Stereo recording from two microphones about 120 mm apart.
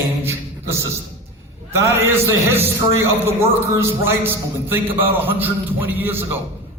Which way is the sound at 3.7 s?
20° right (ahead or behind).